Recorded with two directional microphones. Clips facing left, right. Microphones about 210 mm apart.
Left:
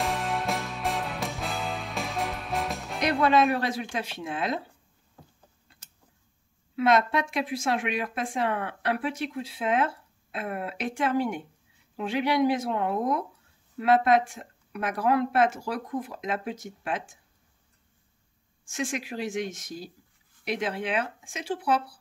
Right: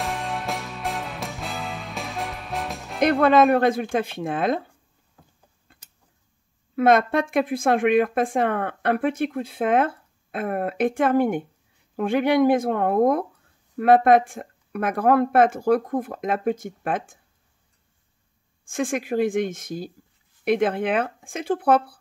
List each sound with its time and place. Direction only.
0.0 s music: centre (ahead or behind)
3.0 s speech: 55° right (ahead or behind)
6.7 s speech: 55° right (ahead or behind)
18.7 s speech: 55° right (ahead or behind)